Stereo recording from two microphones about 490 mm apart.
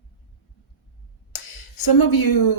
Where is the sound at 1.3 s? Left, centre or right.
Left.